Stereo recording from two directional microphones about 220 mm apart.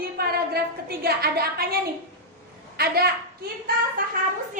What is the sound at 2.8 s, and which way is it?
Child singing, 45° right (ahead or behind).